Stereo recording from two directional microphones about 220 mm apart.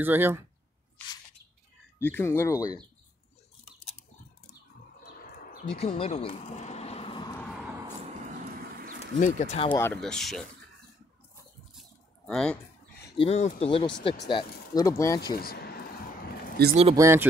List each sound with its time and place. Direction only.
0.0 s speech: 10° right (ahead or behind)
2.0 s speech: 10° left (ahead or behind)
5.8 s speech: 25° left (ahead or behind)
9.2 s speech: 30° left (ahead or behind)
9.7 s speech: 10° left (ahead or behind)
12.3 s speech: 5° left (ahead or behind)
13.2 s speech: 30° left (ahead or behind)
15.3 s speech: 45° left (ahead or behind)
16.6 s speech: 50° right (ahead or behind)
16.9 s speech: 10° right (ahead or behind)